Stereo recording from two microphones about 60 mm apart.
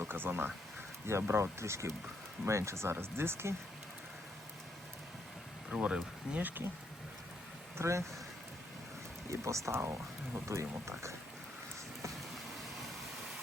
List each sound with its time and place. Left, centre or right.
0.0 s speech: right
1.0 s speech: right
5.7 s speech: centre
7.8 s speech: right
9.3 s speech: right